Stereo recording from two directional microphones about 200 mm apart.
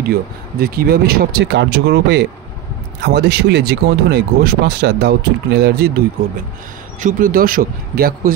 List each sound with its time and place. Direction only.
0.1 s speech: 50° right (ahead or behind)